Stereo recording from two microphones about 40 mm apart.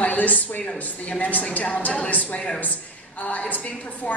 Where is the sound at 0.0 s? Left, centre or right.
Left.